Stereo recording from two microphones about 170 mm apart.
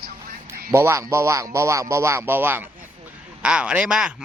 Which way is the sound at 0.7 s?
15° right (ahead or behind).